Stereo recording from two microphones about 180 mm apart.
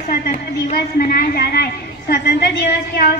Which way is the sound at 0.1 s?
55° left (ahead or behind).